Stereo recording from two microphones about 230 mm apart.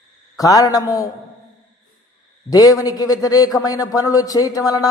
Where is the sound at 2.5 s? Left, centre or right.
Centre.